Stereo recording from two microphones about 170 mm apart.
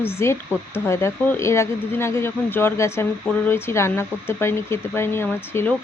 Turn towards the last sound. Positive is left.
turn(degrees=15)  # may be behind; listen again after turning